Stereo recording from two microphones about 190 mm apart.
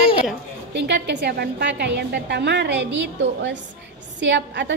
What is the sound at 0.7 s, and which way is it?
A woman's voice, 65° right (ahead or behind).